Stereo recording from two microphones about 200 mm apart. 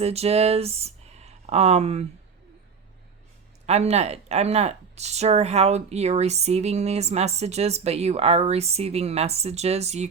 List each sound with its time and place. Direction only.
0.0 s speech: 30° right (ahead or behind)
3.7 s speech: 35° right (ahead or behind)